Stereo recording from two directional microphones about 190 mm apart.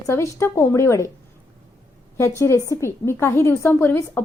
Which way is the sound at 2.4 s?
15° left (ahead or behind).